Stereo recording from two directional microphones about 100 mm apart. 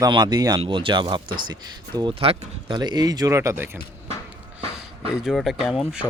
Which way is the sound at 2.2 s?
75° right (ahead or behind).